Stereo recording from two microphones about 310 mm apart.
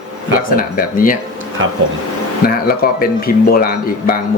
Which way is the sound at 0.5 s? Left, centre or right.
Left.